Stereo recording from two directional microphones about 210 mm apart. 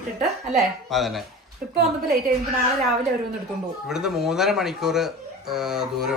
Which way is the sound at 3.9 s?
Centre (ahead or behind).